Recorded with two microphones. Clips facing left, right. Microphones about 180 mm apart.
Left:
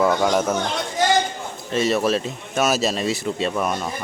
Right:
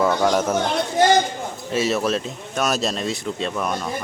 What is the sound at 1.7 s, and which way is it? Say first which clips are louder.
Speech: left 1 dB; centre (ahead or behind).